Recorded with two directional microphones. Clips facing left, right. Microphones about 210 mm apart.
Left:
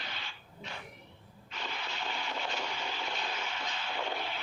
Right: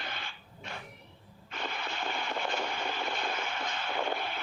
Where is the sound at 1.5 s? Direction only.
55° right (ahead or behind).